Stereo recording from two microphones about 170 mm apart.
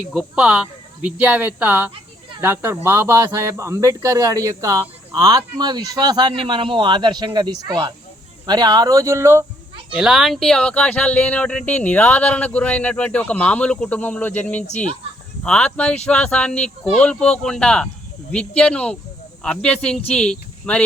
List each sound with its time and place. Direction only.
0.0 s speech: 5° right (ahead or behind)
9.9 s speech: centre (ahead or behind)